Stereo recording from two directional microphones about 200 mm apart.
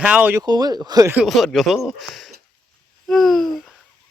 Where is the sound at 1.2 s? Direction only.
Centre (ahead or behind).